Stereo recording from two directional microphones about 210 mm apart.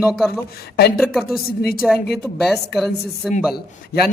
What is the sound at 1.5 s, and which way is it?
Speech, 45° left (ahead or behind).